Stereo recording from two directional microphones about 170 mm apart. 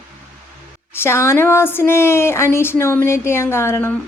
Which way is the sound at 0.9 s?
15° left (ahead or behind).